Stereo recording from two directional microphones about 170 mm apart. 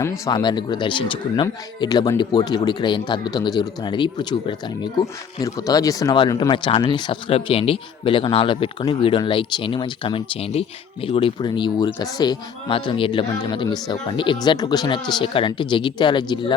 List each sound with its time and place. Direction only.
0.0 s speech: 20° left (ahead or behind)